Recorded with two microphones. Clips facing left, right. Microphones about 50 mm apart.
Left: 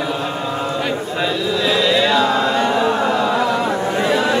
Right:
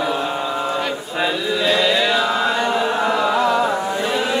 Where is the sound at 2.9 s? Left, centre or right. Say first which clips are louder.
Left 1 dB; centre.